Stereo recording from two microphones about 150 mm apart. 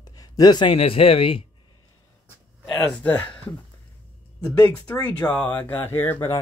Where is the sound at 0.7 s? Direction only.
40° left (ahead or behind).